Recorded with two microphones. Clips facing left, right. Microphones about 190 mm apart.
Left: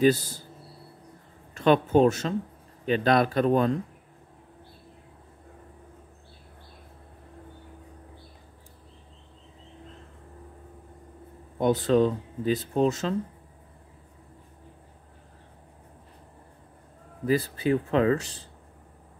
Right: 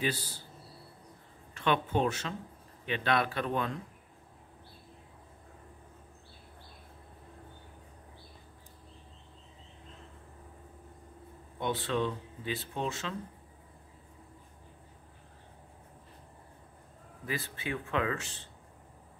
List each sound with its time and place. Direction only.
0.0 s speech: 45° left (ahead or behind)
1.5 s speech: 40° left (ahead or behind)
11.5 s speech: 40° left (ahead or behind)
17.3 s speech: 35° left (ahead or behind)